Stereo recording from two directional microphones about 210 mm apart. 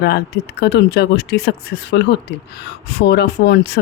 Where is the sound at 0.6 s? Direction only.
55° left (ahead or behind).